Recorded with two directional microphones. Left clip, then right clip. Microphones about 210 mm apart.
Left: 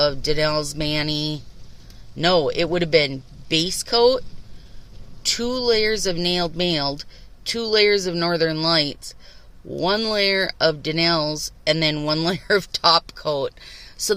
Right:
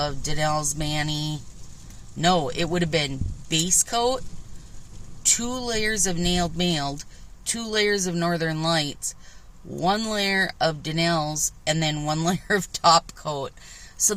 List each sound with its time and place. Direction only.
0.0 s speech: 25° left (ahead or behind)
5.2 s speech: 20° left (ahead or behind)